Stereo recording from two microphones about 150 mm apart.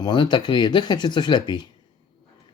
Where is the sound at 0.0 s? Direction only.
30° left (ahead or behind).